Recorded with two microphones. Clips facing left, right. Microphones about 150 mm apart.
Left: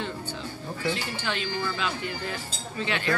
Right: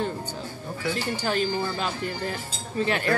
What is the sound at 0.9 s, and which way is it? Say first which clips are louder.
Speech: right 5 dB; 40° right (ahead or behind).